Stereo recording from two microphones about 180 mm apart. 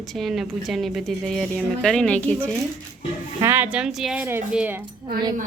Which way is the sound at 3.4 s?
10° right (ahead or behind).